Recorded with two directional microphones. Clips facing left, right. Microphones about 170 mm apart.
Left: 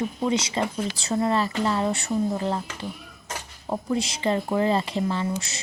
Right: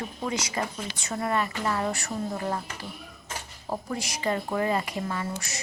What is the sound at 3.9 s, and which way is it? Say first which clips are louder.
Speech: left 5 dB; 25° left (ahead or behind).